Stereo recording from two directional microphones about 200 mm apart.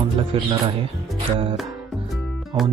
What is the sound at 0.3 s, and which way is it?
Speech, 30° right (ahead or behind).